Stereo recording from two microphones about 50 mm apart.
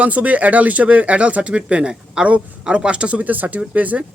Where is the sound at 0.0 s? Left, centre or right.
Right.